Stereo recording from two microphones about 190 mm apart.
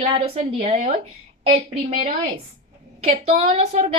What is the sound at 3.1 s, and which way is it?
Speech, 30° right (ahead or behind).